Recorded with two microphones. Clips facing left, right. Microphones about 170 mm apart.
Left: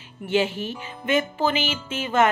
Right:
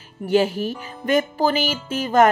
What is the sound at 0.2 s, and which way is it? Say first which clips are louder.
Speech: right 4 dB; 40° right (ahead or behind).